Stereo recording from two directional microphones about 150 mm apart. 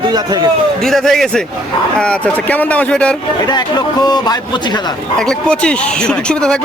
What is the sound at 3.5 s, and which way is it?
Speech, 25° left (ahead or behind).